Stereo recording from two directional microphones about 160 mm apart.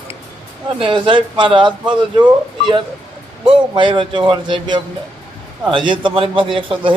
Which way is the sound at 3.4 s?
30° right (ahead or behind).